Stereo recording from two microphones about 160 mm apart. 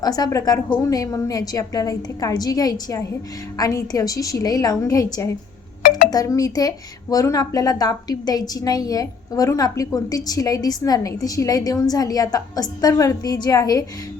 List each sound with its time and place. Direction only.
0.0 s speech: 25° left (ahead or behind)
6.1 s speech: 20° left (ahead or behind)